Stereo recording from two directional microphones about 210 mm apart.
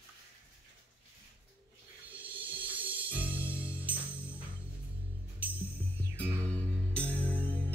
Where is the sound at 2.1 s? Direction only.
10° right (ahead or behind).